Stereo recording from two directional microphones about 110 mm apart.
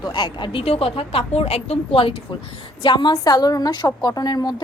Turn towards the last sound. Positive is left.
turn(degrees=35)  # may be behind; listen again after turning